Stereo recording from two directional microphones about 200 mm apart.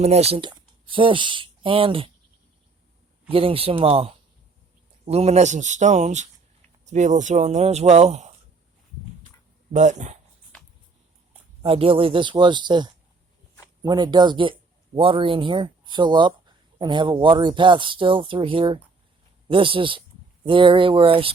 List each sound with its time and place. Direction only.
0.0 s speech: 30° right (ahead or behind)
3.2 s speech: 30° right (ahead or behind)
9.7 s speech: 35° right (ahead or behind)
11.6 s speech: 30° right (ahead or behind)